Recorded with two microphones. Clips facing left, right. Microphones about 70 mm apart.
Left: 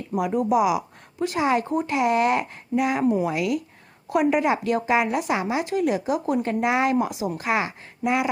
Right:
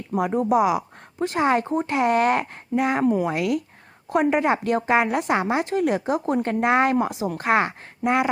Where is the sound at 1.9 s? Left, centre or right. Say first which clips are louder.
Right 1 dB; right.